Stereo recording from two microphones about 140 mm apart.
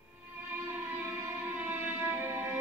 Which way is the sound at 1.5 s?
15° right (ahead or behind).